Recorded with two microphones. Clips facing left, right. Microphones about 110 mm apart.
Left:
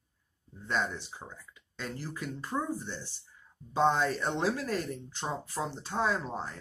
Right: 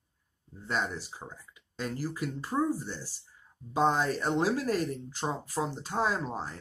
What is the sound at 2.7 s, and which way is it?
Speech, 40° right (ahead or behind).